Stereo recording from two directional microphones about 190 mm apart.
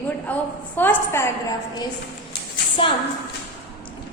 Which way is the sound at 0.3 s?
10° left (ahead or behind).